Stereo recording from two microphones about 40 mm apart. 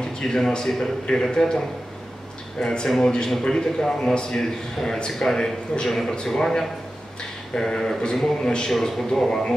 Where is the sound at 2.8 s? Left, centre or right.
Centre.